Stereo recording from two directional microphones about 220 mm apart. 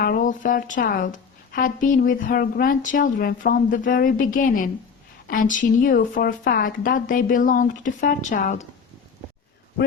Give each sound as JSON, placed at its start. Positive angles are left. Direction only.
{"t": 0.0, "sound": "speech", "side_deg": 40}